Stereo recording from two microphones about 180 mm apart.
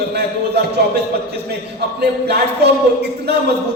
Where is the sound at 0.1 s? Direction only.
65° right (ahead or behind).